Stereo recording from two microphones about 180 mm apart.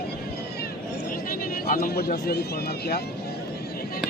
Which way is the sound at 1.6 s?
55° left (ahead or behind).